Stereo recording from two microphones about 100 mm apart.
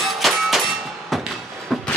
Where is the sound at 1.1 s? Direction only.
Centre (ahead or behind).